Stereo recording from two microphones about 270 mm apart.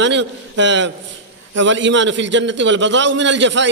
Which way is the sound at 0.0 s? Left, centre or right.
Right.